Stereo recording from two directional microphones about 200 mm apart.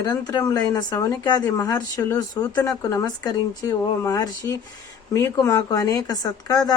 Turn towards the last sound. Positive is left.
turn(degrees=20)  # may be behind; listen again after turning